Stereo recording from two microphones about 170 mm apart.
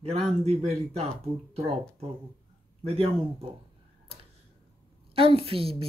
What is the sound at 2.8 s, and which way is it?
Speech, 35° right (ahead or behind).